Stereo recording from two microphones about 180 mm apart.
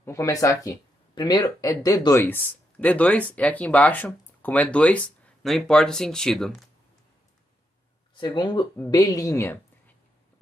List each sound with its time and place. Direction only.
0.0 s speech: 15° left (ahead or behind)
2.2 s speech: 10° left (ahead or behind)
8.1 s speech: 25° left (ahead or behind)